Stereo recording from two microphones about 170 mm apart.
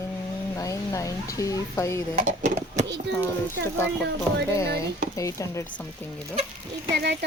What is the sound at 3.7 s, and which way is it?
Speech, 15° left (ahead or behind).